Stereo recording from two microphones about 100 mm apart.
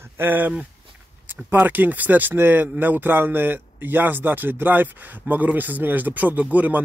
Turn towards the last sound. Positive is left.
turn(degrees=-15)  # may be behind; listen again after turning